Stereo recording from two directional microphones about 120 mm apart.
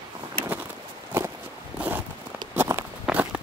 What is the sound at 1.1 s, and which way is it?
Walk, 15° right (ahead or behind).